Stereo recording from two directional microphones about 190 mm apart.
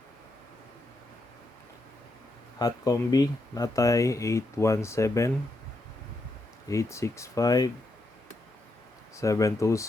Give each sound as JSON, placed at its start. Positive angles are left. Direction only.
{"t": 2.6, "sound": "speech", "side_deg": 20}
{"t": 6.7, "sound": "speech", "side_deg": 15}
{"t": 9.1, "sound": "speech", "side_deg": 15}